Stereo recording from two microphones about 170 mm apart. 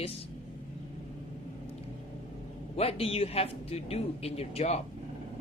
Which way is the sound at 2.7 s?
35° left (ahead or behind).